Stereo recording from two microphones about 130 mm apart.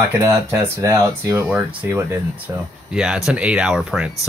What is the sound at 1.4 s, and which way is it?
Speech, 10° right (ahead or behind).